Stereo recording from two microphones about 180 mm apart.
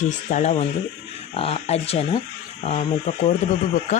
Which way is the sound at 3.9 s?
40° left (ahead or behind).